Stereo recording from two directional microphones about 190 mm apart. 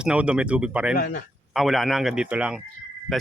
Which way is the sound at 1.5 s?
Centre (ahead or behind).